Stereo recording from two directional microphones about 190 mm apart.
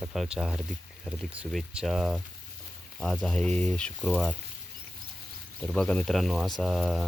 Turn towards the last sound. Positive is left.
turn(degrees=0)  # may be behind; listen again after turning